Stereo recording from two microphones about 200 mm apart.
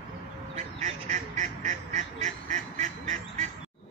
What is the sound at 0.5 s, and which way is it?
Quack, 35° right (ahead or behind).